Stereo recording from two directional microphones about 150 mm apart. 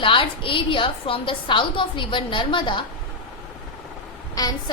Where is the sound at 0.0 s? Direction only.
35° left (ahead or behind).